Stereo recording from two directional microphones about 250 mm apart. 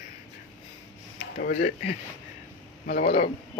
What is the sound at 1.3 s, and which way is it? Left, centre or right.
Speech, left.